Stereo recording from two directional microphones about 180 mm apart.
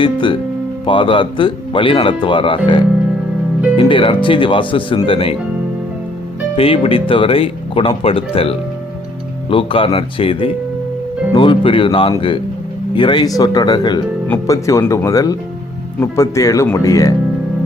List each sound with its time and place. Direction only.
0.0 s speech: 25° left (ahead or behind)
6.6 s speech: 30° left (ahead or behind)